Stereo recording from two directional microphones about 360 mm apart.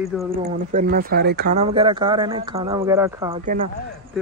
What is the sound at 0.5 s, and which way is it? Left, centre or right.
Speech, right.